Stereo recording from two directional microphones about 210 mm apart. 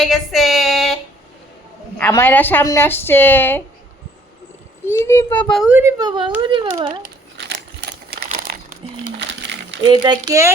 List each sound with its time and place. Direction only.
0.0 s female singing: centre (ahead or behind)
2.0 s a woman's voice: 10° left (ahead or behind)
4.9 s a woman's voice: 10° left (ahead or behind); by 5.9 s 5° right (ahead or behind)
6.0 s speech: 20° right (ahead or behind)
7.3 s crumpling: 55° right (ahead or behind)
9.8 s speech: 20° right (ahead or behind)